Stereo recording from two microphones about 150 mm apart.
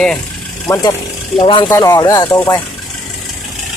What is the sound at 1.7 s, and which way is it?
Speech, 20° left (ahead or behind).